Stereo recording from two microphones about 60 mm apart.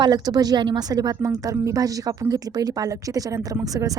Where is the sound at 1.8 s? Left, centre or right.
Right.